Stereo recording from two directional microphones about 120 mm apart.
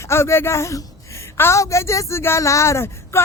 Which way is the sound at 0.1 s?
20° left (ahead or behind).